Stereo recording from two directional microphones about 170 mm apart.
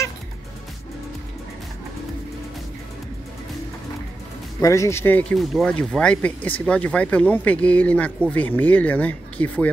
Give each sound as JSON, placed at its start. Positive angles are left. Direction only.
{"t": 4.6, "sound": "speech", "side_deg": 20}
{"t": 5.4, "sound": "speech", "side_deg": 0}